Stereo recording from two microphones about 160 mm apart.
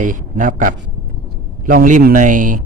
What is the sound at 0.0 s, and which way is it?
A man's voice, 55° right (ahead or behind).